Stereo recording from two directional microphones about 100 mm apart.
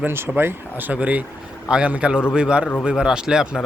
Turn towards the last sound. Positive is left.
turn(degrees=-5)  # may be behind; listen again after turning